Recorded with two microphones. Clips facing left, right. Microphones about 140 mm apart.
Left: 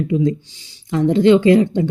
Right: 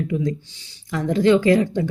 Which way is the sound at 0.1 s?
25° left (ahead or behind).